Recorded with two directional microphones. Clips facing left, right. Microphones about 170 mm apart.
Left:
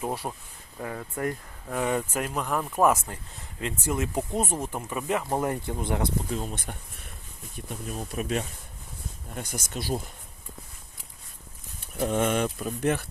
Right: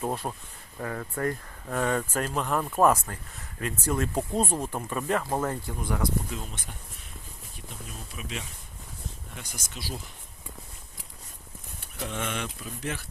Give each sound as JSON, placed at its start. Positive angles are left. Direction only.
{"t": 0.0, "sound": "speech", "side_deg": 10}
{"t": 3.3, "sound": "speech", "side_deg": 20}
{"t": 6.3, "sound": "speech", "side_deg": 45}
{"t": 11.9, "sound": "speech", "side_deg": 45}